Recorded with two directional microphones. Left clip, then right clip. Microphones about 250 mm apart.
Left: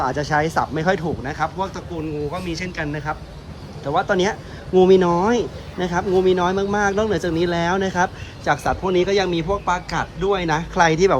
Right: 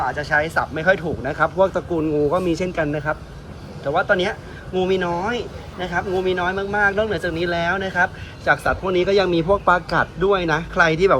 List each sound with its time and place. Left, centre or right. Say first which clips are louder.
0.2 s a man's voice: even; left; by 3.2 s centre
3.8 s a man's voice: even; centre